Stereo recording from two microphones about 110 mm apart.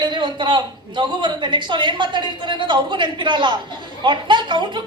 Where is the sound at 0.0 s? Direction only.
45° right (ahead or behind).